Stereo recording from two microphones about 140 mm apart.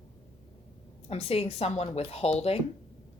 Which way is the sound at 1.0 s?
45° left (ahead or behind).